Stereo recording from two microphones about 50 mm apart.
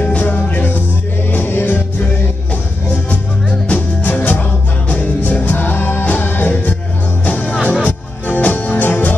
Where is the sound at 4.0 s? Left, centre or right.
Left.